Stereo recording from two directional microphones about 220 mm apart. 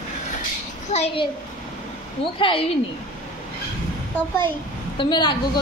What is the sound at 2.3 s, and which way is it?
Speech, 25° left (ahead or behind).